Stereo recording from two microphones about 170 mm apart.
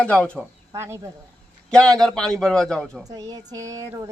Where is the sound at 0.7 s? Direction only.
15° right (ahead or behind).